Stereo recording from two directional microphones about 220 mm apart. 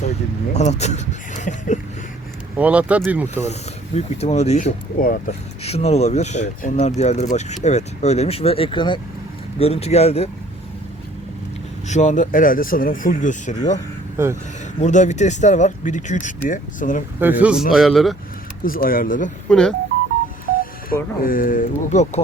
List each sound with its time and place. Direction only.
0.5 s speech: 30° left (ahead or behind)
2.6 s speech: 5° right (ahead or behind)
3.4 s speech: 30° left (ahead or behind)
5.6 s speech: 30° left (ahead or behind)
11.9 s speech: 35° left (ahead or behind)
14.2 s speech: 10° right (ahead or behind)
14.8 s speech: 30° left (ahead or behind)
17.2 s speech: 10° right (ahead or behind)
18.6 s speech: 40° left (ahead or behind)
19.5 s speech: 5° left (ahead or behind)
20.9 s speech: 40° left (ahead or behind)